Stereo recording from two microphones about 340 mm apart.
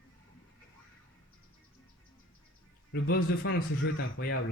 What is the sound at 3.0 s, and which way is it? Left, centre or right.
A man's voice, left.